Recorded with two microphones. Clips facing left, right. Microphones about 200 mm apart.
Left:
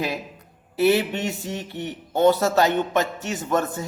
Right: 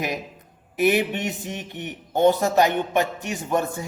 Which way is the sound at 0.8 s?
15° right (ahead or behind).